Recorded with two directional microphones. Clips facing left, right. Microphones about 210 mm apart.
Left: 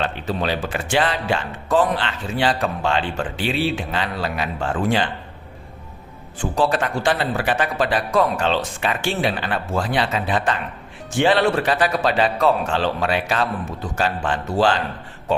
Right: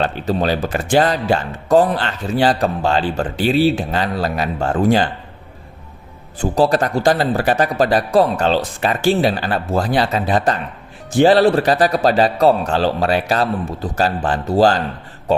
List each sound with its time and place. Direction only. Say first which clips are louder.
0.0 s speech: right 5 dB; 40° right (ahead or behind)
6.4 s speech: right 5 dB; 40° right (ahead or behind)